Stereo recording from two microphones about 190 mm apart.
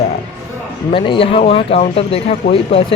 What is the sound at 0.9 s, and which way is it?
Speech, 25° left (ahead or behind).